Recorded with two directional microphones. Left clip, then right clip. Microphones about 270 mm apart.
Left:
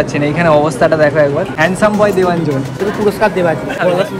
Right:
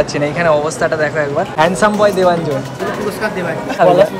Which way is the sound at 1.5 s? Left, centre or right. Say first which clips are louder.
Even; centre.